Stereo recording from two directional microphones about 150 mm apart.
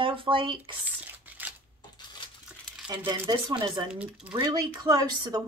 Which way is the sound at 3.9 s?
5° right (ahead or behind).